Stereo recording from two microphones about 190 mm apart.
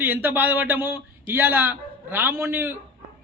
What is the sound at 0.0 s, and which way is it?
A man's voice, 10° right (ahead or behind).